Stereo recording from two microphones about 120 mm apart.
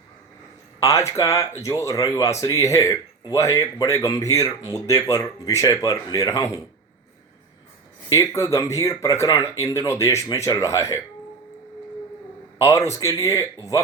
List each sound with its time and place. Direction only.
0.8 s speech: 25° left (ahead or behind)
8.1 s speech: 25° left (ahead or behind)
12.5 s speech: 25° left (ahead or behind)